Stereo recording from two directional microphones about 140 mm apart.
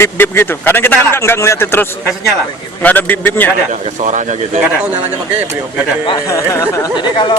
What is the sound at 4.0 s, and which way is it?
Speech, 60° right (ahead or behind).